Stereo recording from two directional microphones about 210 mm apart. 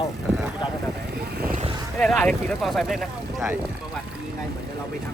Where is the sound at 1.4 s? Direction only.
40° right (ahead or behind).